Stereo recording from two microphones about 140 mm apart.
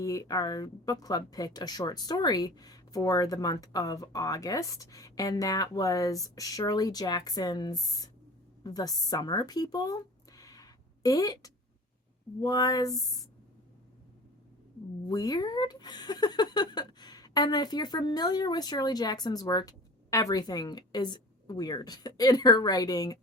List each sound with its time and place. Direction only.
0.0 s speech: 25° left (ahead or behind)
15.0 s speech: 25° left (ahead or behind)